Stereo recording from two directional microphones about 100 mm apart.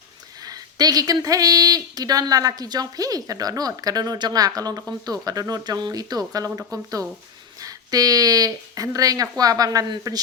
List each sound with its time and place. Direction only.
0.4 s a woman's voice: 40° right (ahead or behind)